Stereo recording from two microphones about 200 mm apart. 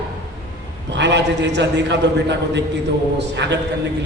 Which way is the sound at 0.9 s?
60° right (ahead or behind).